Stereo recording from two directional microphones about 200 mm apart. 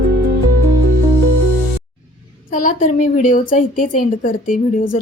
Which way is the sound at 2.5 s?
40° left (ahead or behind).